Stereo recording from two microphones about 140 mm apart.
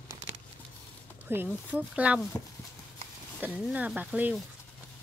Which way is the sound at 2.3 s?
10° left (ahead or behind).